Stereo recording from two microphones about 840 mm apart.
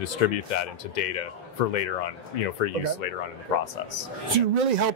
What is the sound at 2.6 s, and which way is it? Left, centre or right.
Speech, left.